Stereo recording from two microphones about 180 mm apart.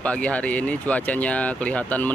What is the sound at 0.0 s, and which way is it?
Speech, 5° left (ahead or behind).